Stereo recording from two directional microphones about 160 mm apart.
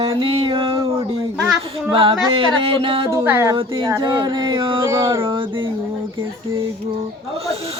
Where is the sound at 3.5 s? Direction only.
30° right (ahead or behind).